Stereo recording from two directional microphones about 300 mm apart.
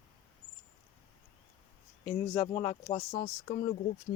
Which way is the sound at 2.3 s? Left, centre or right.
Centre.